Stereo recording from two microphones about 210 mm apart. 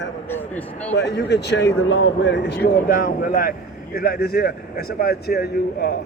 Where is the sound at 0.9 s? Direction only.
55° left (ahead or behind).